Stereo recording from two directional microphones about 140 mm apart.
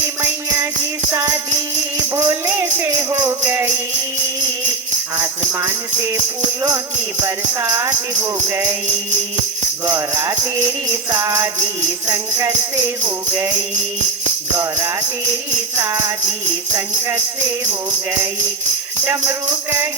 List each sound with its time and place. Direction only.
2.1 s music: 20° right (ahead or behind)
5.1 s music: 20° right (ahead or behind)
7.3 s music: 20° right (ahead or behind)
9.8 s music: 20° right (ahead or behind)
15.8 s music: 20° right (ahead or behind)
19.0 s music: 15° right (ahead or behind)